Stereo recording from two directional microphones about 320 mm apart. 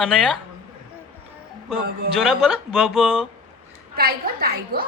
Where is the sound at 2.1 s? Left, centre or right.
Centre.